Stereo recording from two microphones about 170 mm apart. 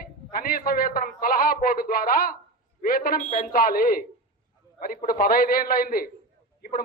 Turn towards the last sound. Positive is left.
turn(degrees=55)  # may be behind; listen again after turning